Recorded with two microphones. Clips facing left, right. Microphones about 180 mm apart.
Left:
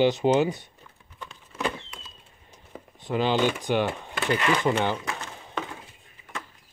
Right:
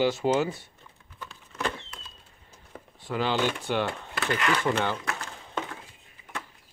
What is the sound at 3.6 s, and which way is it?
Speech, 15° left (ahead or behind).